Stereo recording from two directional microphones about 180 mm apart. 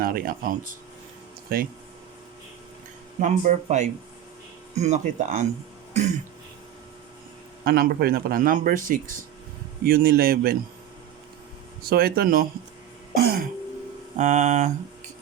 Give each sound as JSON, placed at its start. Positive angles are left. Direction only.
{"t": 0.0, "sound": "speech", "side_deg": -55}
{"t": 3.2, "sound": "speech", "side_deg": -45}
{"t": 5.9, "sound": "throat clearing", "side_deg": -40}
{"t": 7.6, "sound": "speech", "side_deg": -55}
{"t": 11.8, "sound": "speech", "side_deg": -55}
{"t": 14.2, "sound": "speech", "side_deg": -40}